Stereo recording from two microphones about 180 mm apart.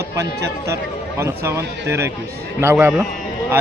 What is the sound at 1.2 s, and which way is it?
A man's voice, 15° right (ahead or behind).